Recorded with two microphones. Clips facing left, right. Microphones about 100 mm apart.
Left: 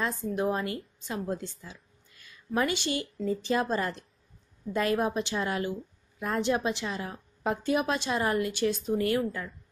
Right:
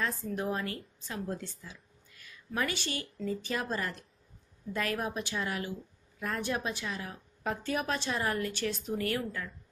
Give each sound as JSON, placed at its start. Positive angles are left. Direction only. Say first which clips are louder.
{"t": 0.0, "sound": "a woman's voice", "louder": "left 5 dB", "side_deg": 20}
{"t": 7.6, "sound": "a woman's voice", "louder": "left 5 dB", "side_deg": 20}